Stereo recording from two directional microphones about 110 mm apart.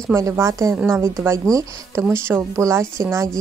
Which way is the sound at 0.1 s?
25° right (ahead or behind).